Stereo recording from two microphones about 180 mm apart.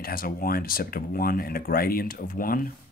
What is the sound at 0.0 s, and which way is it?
Speech, 55° left (ahead or behind).